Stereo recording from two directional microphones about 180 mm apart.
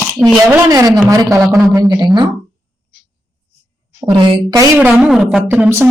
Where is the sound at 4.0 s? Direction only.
25° right (ahead or behind).